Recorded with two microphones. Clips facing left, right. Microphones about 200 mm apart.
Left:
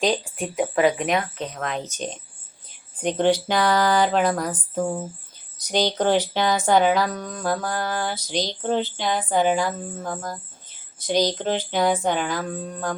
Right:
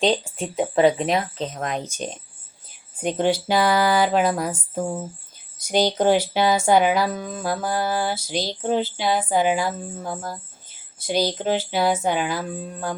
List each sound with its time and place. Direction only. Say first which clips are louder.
0.0 s speech: right 2 dB; 25° right (ahead or behind)
1.8 s music: even; 10° right (ahead or behind)